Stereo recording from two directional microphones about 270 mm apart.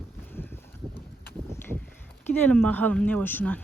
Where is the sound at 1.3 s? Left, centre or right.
Centre.